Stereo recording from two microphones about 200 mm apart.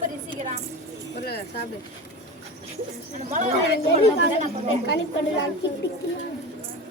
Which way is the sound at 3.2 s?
35° right (ahead or behind).